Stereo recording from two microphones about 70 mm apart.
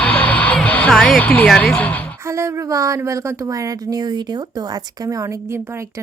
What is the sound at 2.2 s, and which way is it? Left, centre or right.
A woman's voice, right.